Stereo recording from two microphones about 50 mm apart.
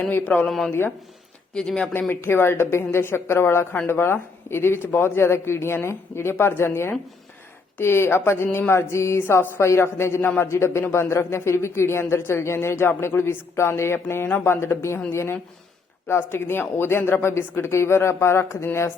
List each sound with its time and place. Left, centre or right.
0.1 s speech: left
0.4 s speech: centre
1.9 s speech: left